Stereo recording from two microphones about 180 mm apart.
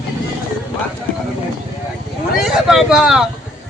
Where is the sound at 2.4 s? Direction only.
Centre (ahead or behind).